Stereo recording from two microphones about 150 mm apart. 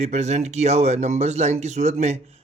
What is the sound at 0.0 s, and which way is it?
Speech, 50° right (ahead or behind).